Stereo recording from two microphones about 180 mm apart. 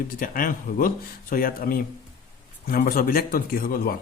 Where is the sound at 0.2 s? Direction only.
50° left (ahead or behind).